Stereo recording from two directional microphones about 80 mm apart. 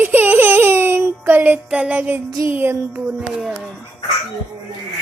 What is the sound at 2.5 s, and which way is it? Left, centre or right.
Laughter, right.